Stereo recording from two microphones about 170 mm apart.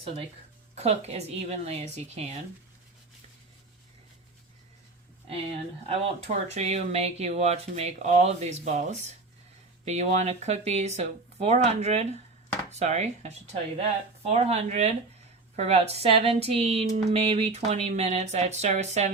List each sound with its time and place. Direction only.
0.8 s speech: 40° right (ahead or behind)
5.8 s speech: 35° right (ahead or behind)